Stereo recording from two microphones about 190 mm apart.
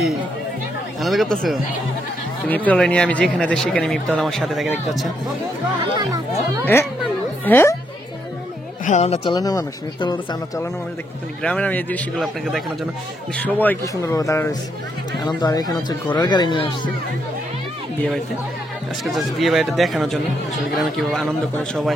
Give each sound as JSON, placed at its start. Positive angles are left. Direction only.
{"t": 1.0, "sound": "speech", "side_deg": 0}
{"t": 5.8, "sound": "speech", "side_deg": -20}
{"t": 6.6, "sound": "a man's voice", "side_deg": 15}
{"t": 7.0, "sound": "a sound", "side_deg": 10}
{"t": 8.8, "sound": "speech", "side_deg": 35}
{"t": 9.3, "sound": "speech", "side_deg": 20}
{"t": 11.4, "sound": "a man's voice", "side_deg": 5}
{"t": 19.0, "sound": "speech", "side_deg": 0}